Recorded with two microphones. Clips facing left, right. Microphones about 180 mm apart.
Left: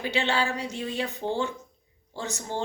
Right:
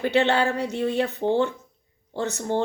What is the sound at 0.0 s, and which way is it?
Speech, 60° right (ahead or behind).